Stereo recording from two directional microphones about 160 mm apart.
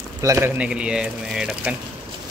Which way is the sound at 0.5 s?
5° right (ahead or behind).